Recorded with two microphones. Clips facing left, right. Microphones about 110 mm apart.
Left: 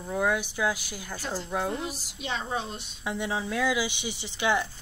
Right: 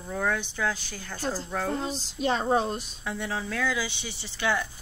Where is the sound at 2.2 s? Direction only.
40° right (ahead or behind).